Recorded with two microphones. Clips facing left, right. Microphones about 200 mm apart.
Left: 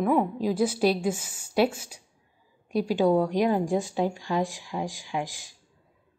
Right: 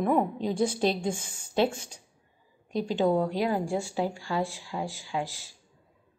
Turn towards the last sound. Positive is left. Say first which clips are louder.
# left 1 dB
turn(degrees=15)  # may be behind; listen again after turning